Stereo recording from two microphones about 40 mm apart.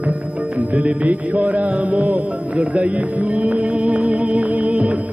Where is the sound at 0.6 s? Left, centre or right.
Right.